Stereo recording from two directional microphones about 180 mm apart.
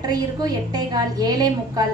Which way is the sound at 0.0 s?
20° right (ahead or behind).